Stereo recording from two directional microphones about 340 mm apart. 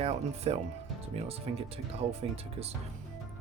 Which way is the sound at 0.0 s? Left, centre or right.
Centre.